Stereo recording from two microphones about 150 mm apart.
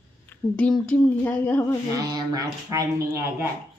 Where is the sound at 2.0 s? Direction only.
25° right (ahead or behind).